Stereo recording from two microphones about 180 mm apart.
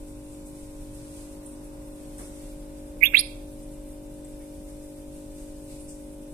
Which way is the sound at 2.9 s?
50° right (ahead or behind).